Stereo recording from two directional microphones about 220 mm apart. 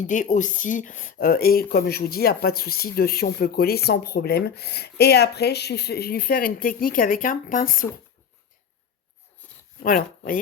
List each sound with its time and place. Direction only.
0.0 s speech: 35° left (ahead or behind)
9.4 s a sound: 10° left (ahead or behind)
9.8 s speech: 40° left (ahead or behind)